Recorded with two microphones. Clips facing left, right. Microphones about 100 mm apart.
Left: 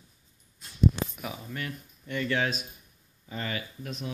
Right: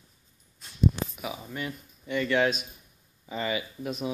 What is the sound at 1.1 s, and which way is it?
Speech, 10° right (ahead or behind).